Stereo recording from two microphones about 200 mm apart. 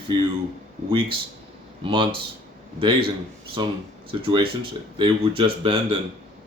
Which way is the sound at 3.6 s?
25° right (ahead or behind).